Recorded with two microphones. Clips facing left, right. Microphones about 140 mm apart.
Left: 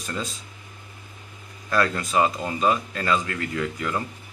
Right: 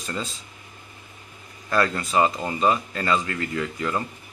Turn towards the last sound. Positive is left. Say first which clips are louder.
# right 1 dB
turn(degrees=-5)  # may be behind; listen again after turning